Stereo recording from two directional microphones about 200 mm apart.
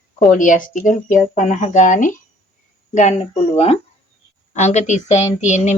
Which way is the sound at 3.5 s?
30° left (ahead or behind).